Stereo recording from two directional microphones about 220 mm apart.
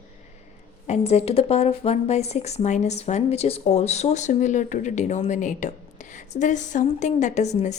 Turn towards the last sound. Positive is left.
turn(degrees=30)  # may be behind; listen again after turning